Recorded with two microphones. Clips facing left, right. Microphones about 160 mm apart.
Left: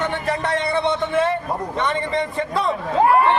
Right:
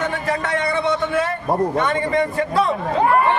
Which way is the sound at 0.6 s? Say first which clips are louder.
Even; 25° left (ahead or behind).